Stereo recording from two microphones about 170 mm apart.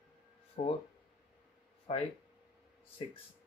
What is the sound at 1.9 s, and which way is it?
Speech, 40° left (ahead or behind).